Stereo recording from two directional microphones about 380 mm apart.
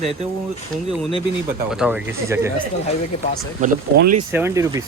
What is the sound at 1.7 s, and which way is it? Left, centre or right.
Speech, centre.